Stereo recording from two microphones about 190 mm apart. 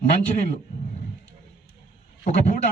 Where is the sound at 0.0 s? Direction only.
45° left (ahead or behind).